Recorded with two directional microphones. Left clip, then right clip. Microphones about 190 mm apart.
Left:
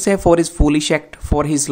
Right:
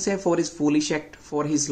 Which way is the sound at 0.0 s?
45° left (ahead or behind).